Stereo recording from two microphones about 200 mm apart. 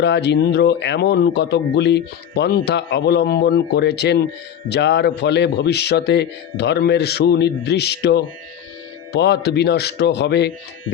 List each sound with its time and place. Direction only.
0.0 s a man's voice: 60° left (ahead or behind)